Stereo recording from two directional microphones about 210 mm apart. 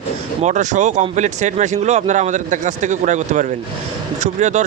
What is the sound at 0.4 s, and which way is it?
Speech, 35° right (ahead or behind).